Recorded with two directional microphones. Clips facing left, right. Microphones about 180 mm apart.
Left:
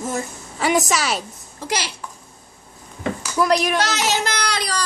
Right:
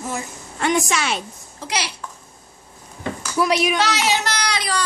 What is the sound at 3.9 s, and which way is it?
Speech, 50° left (ahead or behind).